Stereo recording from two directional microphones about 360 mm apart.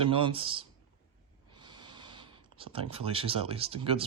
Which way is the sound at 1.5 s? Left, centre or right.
Centre.